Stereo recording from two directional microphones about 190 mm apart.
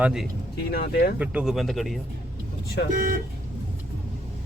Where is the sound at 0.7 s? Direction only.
55° left (ahead or behind).